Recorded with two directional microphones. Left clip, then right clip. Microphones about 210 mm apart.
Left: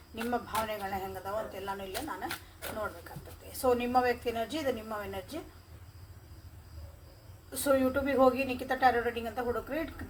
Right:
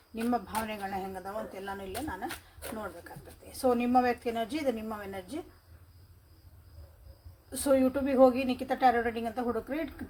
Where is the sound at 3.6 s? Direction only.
45° right (ahead or behind).